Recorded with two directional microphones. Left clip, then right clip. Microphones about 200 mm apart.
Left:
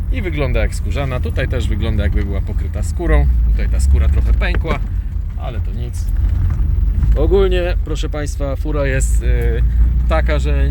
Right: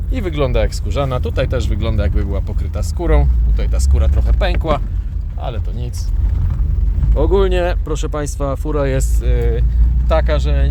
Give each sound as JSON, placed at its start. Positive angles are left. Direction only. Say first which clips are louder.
{"t": 0.1, "sound": "speech", "louder": "right 3 dB", "side_deg": -20}
{"t": 7.2, "sound": "speech", "louder": "even", "side_deg": -20}